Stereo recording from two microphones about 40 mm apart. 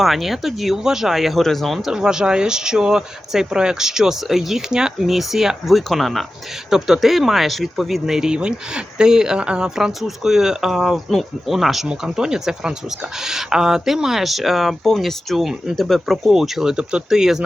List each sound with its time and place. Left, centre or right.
0.0 s speech: centre
0.8 s speech: centre
1.9 s speech: centre
6.7 s speech: centre
8.4 s speech: right
10.9 s speech: centre
11.9 s speech: centre
16.3 s speech: centre